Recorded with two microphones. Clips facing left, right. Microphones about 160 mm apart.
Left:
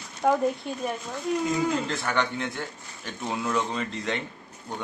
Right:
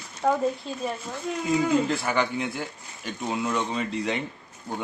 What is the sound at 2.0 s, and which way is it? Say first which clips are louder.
Speech: right 2 dB; 10° right (ahead or behind).